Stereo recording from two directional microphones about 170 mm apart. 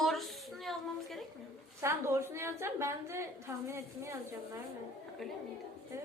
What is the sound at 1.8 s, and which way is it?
A woman's voice, 15° right (ahead or behind).